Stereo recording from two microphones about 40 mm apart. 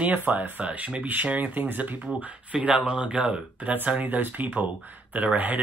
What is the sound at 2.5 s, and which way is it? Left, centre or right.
Speech, right.